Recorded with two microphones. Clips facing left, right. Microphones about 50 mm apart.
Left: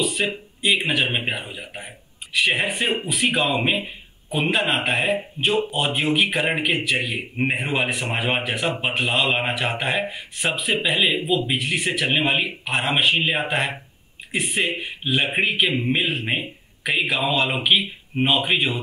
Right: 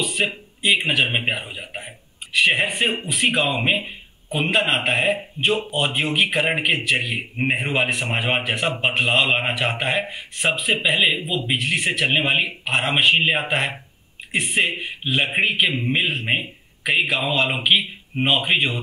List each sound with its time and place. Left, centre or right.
0.0 s a sound: centre
0.6 s speech: centre
1.0 s speech: centre
1.3 s a man's voice: centre